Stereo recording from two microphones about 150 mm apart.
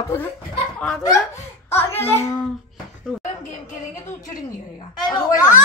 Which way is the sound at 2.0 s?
15° left (ahead or behind).